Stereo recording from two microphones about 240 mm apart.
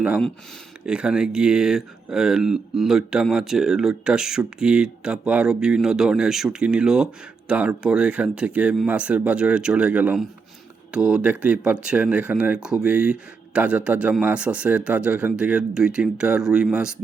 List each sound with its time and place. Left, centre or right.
0.0 s speech: centre